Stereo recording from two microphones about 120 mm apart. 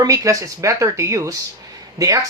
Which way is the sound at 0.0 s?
25° right (ahead or behind).